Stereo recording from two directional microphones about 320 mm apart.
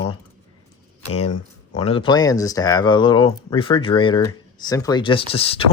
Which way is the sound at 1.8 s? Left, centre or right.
Centre.